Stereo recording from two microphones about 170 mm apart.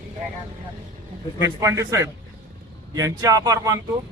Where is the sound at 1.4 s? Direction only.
15° right (ahead or behind).